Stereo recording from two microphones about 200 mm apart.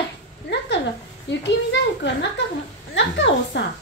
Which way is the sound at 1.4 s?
60° left (ahead or behind).